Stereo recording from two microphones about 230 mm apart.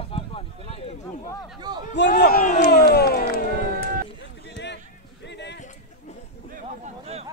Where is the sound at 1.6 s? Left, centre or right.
Centre.